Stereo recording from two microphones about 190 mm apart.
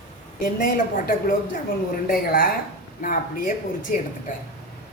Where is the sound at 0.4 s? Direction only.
50° left (ahead or behind).